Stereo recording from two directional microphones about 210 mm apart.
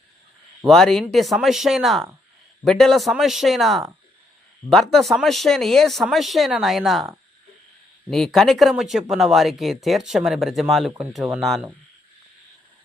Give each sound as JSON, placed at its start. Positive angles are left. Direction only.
{"t": 0.7, "sound": "speech", "side_deg": 0}
{"t": 8.1, "sound": "speech", "side_deg": 0}